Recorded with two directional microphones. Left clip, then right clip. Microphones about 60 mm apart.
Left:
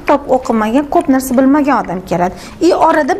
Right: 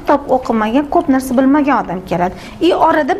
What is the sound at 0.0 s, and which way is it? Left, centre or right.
A woman's voice, left.